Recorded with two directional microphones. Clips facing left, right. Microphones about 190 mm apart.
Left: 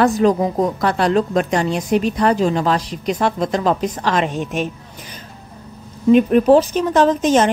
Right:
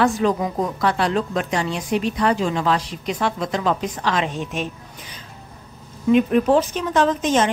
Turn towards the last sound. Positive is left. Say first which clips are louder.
# left 4 dB
turn(degrees=40)  # may be behind; listen again after turning